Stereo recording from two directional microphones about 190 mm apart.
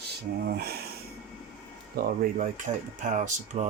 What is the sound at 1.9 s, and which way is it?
Speech, 45° right (ahead or behind).